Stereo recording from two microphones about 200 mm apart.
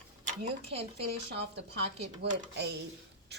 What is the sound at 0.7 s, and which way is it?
A woman's voice, 55° right (ahead or behind).